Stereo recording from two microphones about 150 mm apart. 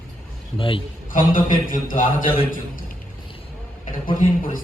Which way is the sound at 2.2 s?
35° left (ahead or behind).